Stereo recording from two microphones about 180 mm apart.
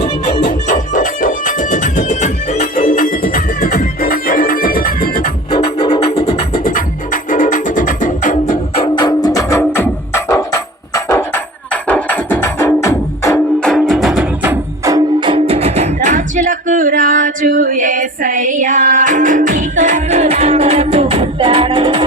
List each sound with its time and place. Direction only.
0.0 s music: 40° left (ahead or behind)
5.5 s music: 35° left (ahead or behind)
6.5 s music: 50° left (ahead or behind)
8.7 s music: 30° left (ahead or behind); by 22.0 s 30° right (ahead or behind)